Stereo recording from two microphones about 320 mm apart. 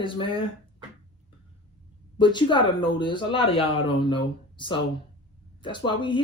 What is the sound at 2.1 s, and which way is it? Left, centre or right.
Speech, centre.